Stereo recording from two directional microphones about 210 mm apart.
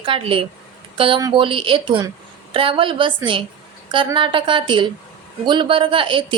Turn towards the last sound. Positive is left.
turn(degrees=-25)  # may be behind; listen again after turning